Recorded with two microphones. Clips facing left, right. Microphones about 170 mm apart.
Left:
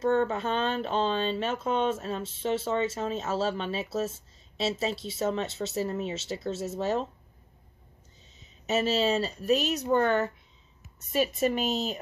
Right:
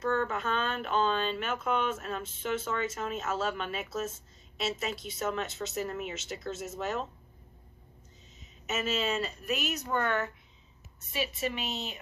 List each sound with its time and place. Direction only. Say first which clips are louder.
0.0 s speech: left 5 dB; 30° left (ahead or behind)
8.6 s speech: left 6 dB; 35° left (ahead or behind)